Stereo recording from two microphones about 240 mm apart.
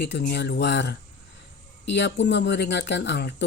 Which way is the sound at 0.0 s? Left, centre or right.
Left.